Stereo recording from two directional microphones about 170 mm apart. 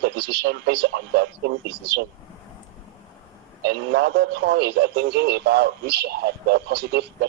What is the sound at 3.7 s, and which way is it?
Speech, 70° right (ahead or behind).